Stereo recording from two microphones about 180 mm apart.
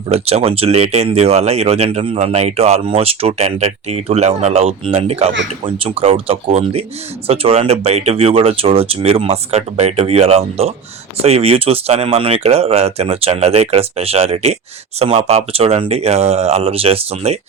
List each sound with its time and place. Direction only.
0.1 s speech: 35° right (ahead or behind)